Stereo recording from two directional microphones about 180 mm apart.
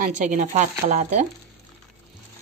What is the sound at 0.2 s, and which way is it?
Speech, 45° right (ahead or behind).